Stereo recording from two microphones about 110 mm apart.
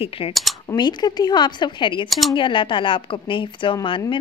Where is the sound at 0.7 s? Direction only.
45° left (ahead or behind).